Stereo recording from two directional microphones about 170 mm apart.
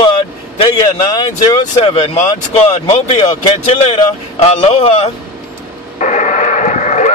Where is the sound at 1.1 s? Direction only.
25° left (ahead or behind).